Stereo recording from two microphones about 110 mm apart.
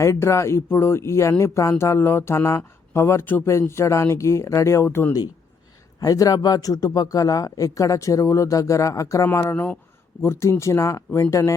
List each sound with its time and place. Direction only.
0.0 s speech: 25° left (ahead or behind)
6.0 s speech: 35° left (ahead or behind)